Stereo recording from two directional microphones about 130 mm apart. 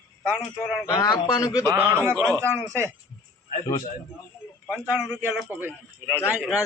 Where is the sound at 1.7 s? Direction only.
20° right (ahead or behind).